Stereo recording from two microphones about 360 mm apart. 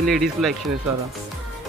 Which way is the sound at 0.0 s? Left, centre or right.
Centre.